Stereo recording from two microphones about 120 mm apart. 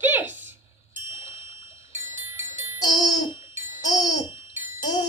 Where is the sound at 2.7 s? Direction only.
35° left (ahead or behind).